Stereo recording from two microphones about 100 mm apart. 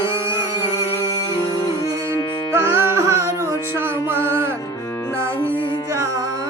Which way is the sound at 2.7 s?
25° right (ahead or behind).